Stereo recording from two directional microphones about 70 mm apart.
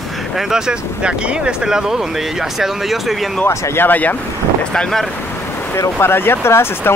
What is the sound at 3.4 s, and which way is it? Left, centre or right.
Speech, left.